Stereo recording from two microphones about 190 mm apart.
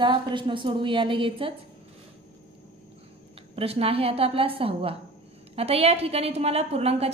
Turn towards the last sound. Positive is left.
turn(degrees=-35)  # may be behind; listen again after turning